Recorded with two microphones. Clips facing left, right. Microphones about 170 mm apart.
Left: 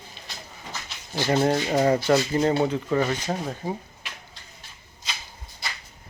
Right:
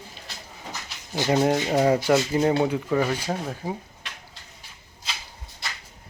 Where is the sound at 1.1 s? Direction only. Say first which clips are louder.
Right 1 dB; 15° right (ahead or behind).